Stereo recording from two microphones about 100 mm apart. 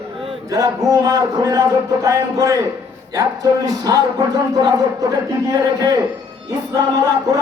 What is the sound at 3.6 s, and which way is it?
Speech, 40° right (ahead or behind).